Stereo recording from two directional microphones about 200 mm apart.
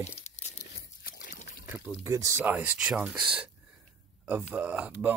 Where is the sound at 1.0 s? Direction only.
45° left (ahead or behind).